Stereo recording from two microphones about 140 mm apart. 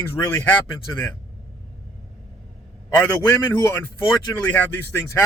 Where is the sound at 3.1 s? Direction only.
15° left (ahead or behind).